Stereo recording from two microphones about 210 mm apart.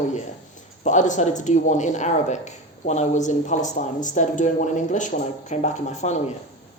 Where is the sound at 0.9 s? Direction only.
35° left (ahead or behind).